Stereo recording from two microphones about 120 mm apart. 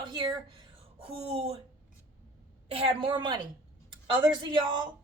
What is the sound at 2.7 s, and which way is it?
A woman's voice, 50° right (ahead or behind).